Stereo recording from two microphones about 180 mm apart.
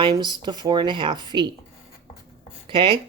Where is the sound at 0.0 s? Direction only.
25° right (ahead or behind).